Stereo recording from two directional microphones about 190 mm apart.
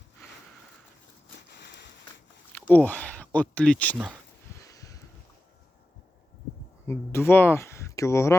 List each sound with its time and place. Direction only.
2.7 s speech: 10° left (ahead or behind)
4.6 s a sound: 15° left (ahead or behind)
6.8 s speech: 10° left (ahead or behind)